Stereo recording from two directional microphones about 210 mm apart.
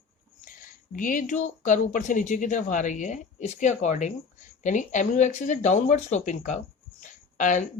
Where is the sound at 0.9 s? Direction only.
40° left (ahead or behind).